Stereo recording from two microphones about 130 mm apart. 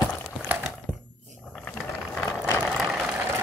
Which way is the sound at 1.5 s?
10° left (ahead or behind).